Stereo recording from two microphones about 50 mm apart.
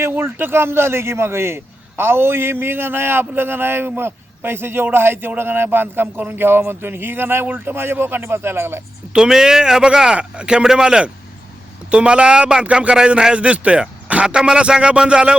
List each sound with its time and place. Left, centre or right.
0.0 s a man's voice: right
9.1 s speech: centre